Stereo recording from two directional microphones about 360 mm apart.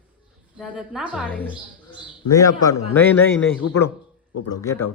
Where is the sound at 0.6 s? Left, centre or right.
Centre.